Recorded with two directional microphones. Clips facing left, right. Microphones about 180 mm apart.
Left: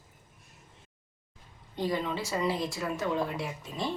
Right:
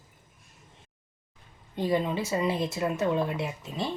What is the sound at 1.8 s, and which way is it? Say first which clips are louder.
Speech: right 4 dB; 15° right (ahead or behind).